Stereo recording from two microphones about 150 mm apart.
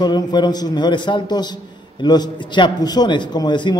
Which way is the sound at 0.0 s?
30° left (ahead or behind).